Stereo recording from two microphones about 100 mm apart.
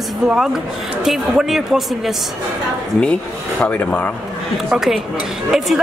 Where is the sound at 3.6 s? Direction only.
15° left (ahead or behind).